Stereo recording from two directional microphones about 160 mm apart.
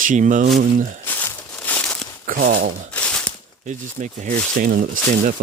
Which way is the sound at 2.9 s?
5° left (ahead or behind).